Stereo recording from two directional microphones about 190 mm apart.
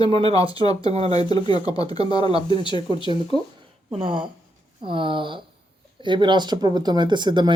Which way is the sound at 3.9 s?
25° right (ahead or behind).